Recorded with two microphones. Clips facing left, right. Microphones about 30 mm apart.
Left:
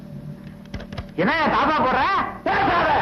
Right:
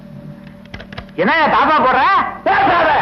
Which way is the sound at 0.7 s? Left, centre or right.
Right.